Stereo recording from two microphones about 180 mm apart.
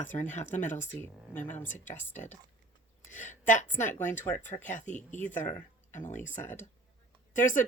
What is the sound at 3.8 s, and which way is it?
Speech, 10° left (ahead or behind).